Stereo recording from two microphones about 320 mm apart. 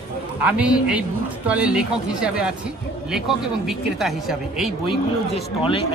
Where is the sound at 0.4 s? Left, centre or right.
Centre.